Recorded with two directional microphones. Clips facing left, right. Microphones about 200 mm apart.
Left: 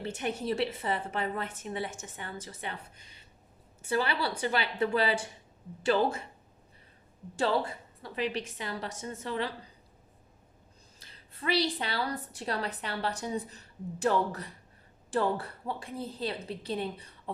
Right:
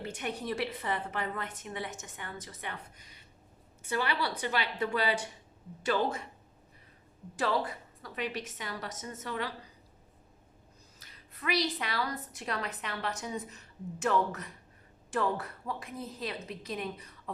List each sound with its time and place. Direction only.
0.0 s a woman's voice: 30° left (ahead or behind)
7.3 s a woman's voice: 30° left (ahead or behind)
11.0 s a woman's voice: 30° left (ahead or behind)